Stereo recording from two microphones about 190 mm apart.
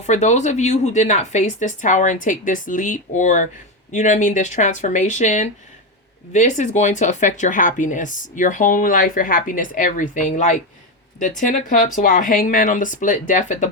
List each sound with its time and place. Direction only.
0.0 s speech: 40° left (ahead or behind)